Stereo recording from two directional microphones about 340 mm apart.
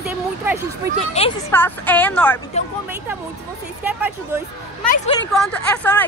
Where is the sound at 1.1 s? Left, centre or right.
Centre.